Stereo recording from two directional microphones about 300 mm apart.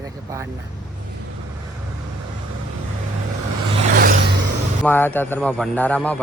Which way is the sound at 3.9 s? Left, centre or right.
Right.